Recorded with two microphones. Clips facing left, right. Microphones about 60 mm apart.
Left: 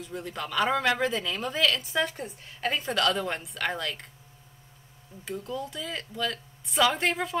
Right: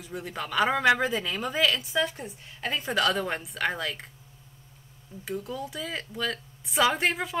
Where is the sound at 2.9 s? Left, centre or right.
Centre.